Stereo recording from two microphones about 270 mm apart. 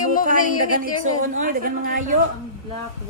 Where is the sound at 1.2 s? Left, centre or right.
Right.